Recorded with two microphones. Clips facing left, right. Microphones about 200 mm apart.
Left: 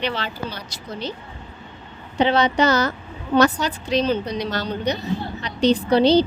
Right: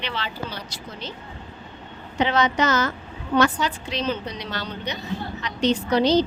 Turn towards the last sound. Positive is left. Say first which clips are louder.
# left 3 dB
turn(degrees=30)  # may be behind; listen again after turning